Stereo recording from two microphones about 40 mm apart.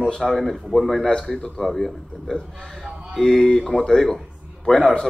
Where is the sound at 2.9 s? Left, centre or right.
Right.